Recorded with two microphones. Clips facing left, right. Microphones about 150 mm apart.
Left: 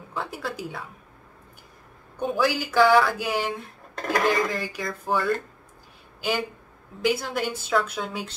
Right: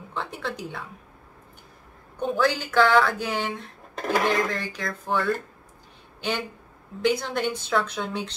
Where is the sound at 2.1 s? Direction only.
5° left (ahead or behind).